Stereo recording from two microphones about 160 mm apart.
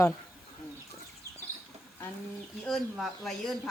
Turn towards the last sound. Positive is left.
turn(degrees=0)  # may be behind; listen again after turning